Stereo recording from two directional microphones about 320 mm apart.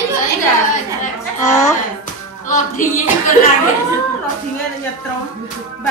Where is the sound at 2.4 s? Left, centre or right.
Left.